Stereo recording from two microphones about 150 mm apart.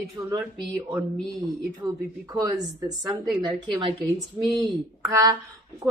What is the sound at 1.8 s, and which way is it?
A woman's voice, 25° right (ahead or behind).